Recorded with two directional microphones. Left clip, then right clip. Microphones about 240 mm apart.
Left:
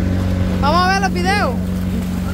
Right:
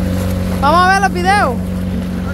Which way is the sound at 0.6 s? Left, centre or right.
Centre.